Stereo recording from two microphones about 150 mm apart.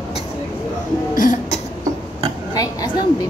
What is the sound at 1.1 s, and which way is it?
Cough, 60° left (ahead or behind).